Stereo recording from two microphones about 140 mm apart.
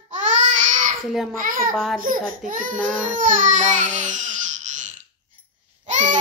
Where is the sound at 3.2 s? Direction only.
65° right (ahead or behind).